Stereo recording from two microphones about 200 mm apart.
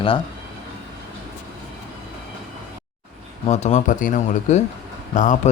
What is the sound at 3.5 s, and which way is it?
Speech, 35° left (ahead or behind).